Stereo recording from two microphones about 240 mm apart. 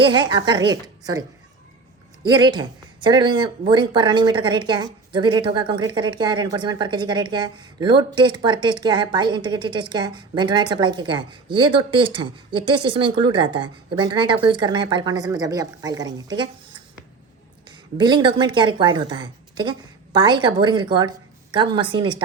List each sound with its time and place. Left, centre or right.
0.0 s a woman's voice: centre
2.2 s a woman's voice: centre
17.7 s a woman's voice: centre